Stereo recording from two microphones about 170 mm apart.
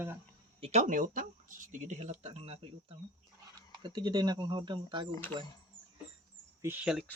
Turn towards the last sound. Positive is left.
turn(degrees=-5)  # may be behind; listen again after turning